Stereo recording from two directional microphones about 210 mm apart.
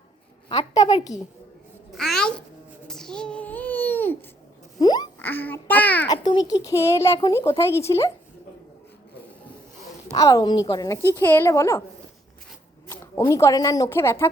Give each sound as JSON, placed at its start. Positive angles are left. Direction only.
{"t": 0.4, "sound": "a woman's voice", "side_deg": 20}
{"t": 1.9, "sound": "a child's voice", "side_deg": 0}
{"t": 2.8, "sound": "a sound", "side_deg": 0}
{"t": 4.8, "sound": "a child's voice", "side_deg": 20}
{"t": 6.1, "sound": "a woman's voice", "side_deg": 20}
{"t": 10.2, "sound": "a woman's voice", "side_deg": 15}
{"t": 12.9, "sound": "speech", "side_deg": 15}